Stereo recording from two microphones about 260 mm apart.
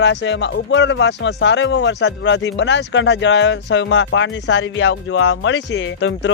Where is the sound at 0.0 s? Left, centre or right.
Left.